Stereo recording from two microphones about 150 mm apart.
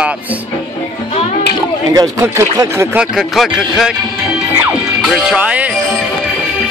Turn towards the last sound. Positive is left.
turn(degrees=-10)  # may be behind; listen again after turning